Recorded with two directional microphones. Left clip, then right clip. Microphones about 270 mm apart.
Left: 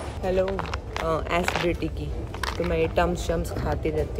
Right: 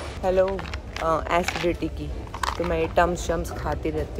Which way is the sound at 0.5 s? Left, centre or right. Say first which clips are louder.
Even; left.